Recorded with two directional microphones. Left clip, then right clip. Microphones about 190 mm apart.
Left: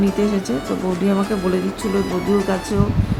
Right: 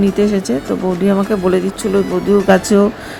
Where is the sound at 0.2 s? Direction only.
25° right (ahead or behind).